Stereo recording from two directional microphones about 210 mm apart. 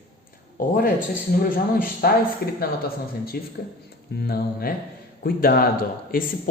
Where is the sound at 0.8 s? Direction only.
45° left (ahead or behind).